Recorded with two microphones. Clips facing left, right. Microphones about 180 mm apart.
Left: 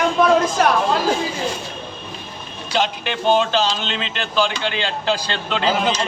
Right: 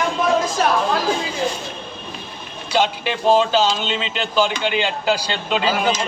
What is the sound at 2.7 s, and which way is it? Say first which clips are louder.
Speech: right 2 dB; 5° right (ahead or behind).